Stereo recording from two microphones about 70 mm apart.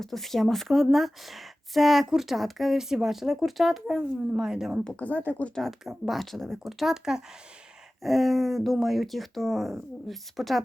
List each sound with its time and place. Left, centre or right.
0.0 s speech: centre
4.8 s speech: centre
5.5 s speech: centre